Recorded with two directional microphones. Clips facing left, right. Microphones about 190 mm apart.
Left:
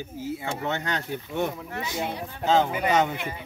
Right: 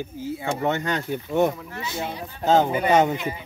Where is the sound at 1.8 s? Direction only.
15° left (ahead or behind).